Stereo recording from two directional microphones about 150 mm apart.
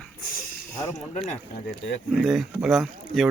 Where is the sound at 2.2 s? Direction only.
Centre (ahead or behind).